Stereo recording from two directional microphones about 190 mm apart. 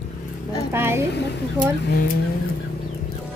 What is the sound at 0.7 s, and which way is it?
Speech, 15° right (ahead or behind).